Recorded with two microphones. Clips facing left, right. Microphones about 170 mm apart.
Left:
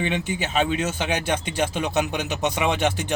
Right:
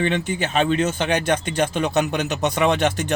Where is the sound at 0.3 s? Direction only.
50° right (ahead or behind).